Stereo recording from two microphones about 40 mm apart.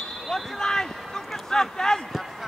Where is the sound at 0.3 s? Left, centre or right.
Centre.